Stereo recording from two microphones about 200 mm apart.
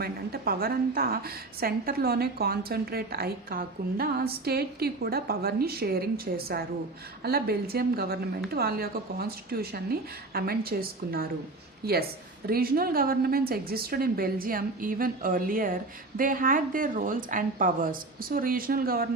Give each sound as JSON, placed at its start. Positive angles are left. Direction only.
{"t": 0.0, "sound": "a woman's voice", "side_deg": -50}